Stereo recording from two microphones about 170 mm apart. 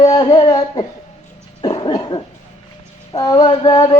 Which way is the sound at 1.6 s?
25° left (ahead or behind).